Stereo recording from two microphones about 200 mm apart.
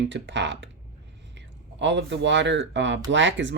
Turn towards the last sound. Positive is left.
turn(degrees=-65)  # may be behind; listen again after turning